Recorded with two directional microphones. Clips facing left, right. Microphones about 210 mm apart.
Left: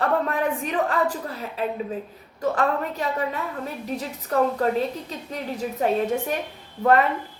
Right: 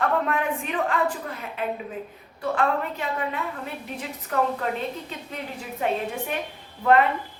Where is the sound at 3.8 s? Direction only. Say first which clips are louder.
Left 4 dB; 40° left (ahead or behind).